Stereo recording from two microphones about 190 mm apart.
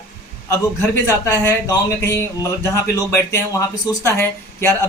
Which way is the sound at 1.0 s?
15° left (ahead or behind).